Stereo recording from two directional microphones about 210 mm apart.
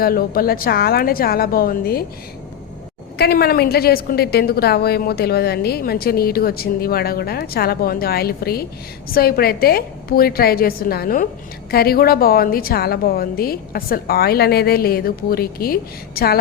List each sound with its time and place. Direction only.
0.0 s a woman's voice: 45° left (ahead or behind)
3.2 s a woman's voice: 50° left (ahead or behind)